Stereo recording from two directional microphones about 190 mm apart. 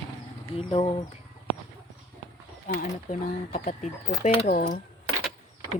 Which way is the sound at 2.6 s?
40° left (ahead or behind).